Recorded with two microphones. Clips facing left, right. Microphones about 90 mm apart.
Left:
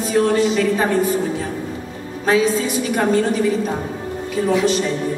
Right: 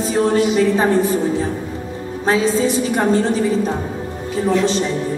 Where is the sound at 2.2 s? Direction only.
30° right (ahead or behind).